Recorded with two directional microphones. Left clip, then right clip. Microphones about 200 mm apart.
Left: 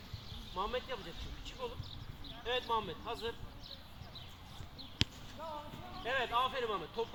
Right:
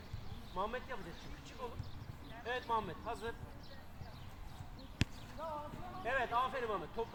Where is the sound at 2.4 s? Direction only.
20° right (ahead or behind).